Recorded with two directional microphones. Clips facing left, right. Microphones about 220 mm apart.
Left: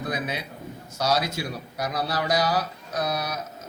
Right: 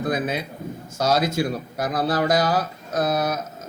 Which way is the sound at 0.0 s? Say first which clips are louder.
Right 6 dB; 50° right (ahead or behind).